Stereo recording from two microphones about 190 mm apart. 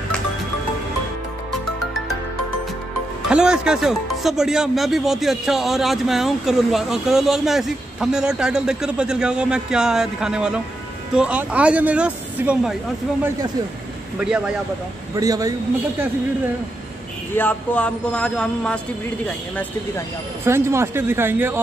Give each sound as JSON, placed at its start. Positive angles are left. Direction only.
{"t": 3.3, "sound": "speech", "side_deg": -5}
{"t": 14.2, "sound": "speech", "side_deg": -5}
{"t": 15.1, "sound": "speech", "side_deg": -20}
{"t": 17.4, "sound": "speech", "side_deg": 10}
{"t": 20.4, "sound": "speech", "side_deg": -15}